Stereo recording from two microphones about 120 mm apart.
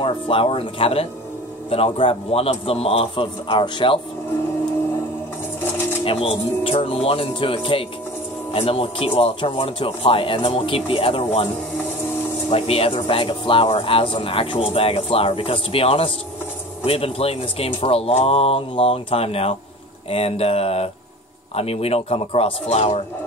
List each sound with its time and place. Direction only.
0.0 s speech: 50° left (ahead or behind)
6.0 s speech: 50° left (ahead or behind)
12.4 s speech: 55° left (ahead or behind)
13.2 s speech: 45° left (ahead or behind)